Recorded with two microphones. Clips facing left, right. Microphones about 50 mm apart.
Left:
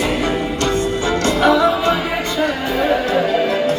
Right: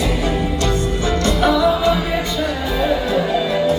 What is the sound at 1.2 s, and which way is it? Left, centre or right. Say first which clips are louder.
Music: left 2 dB; left.